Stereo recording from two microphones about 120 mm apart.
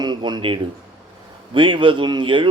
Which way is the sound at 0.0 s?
35° right (ahead or behind).